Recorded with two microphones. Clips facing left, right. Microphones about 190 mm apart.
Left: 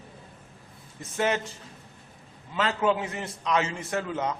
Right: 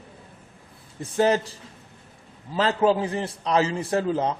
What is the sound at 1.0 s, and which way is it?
Speech, 35° right (ahead or behind).